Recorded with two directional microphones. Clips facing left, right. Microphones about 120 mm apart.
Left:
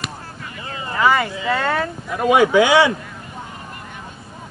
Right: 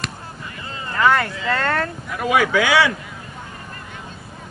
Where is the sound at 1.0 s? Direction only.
5° left (ahead or behind).